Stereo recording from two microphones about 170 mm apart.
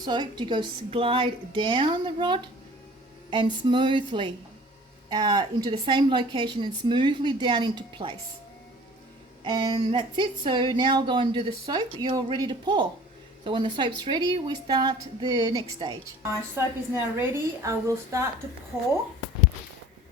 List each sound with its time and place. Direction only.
0.0 s a woman's voice: 25° right (ahead or behind)
9.4 s a woman's voice: 25° right (ahead or behind)